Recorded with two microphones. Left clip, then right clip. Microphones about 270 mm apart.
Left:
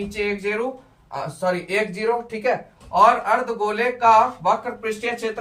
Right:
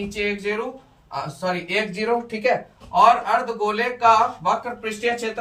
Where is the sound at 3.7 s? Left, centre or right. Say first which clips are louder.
Left 2 dB; centre.